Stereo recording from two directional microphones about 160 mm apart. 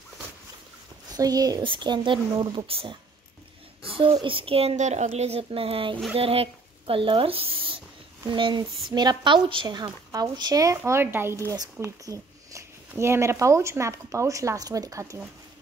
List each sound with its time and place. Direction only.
1.1 s a woman's voice: 25° right (ahead or behind)